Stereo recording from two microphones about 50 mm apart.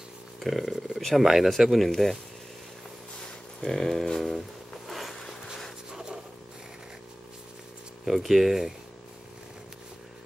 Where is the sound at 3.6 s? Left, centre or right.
Centre.